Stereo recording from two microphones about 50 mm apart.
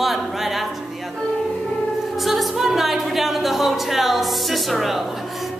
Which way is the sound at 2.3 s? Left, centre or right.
Centre.